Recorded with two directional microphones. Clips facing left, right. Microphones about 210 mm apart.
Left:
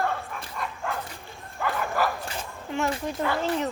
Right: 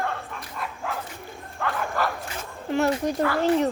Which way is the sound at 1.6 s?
5° left (ahead or behind).